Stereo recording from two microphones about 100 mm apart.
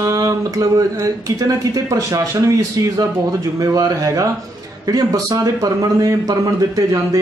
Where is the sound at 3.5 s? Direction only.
35° right (ahead or behind).